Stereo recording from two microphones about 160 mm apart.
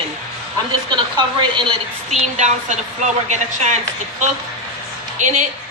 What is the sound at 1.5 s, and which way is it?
Speech, 30° right (ahead or behind).